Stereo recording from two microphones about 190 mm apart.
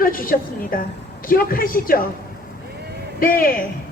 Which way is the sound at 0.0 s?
50° left (ahead or behind).